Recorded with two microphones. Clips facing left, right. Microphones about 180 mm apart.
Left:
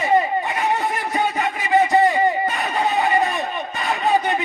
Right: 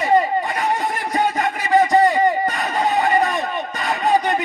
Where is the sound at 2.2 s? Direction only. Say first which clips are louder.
Right 1 dB; 40° right (ahead or behind).